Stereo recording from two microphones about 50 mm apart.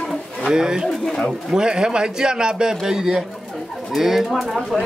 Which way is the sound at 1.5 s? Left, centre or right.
Centre.